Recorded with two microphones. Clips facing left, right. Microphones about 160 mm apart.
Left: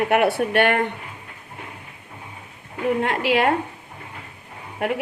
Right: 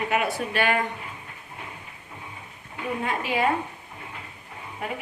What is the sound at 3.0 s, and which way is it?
Speech, 75° left (ahead or behind).